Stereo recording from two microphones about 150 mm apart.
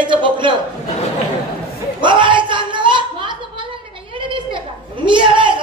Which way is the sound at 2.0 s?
30° right (ahead or behind).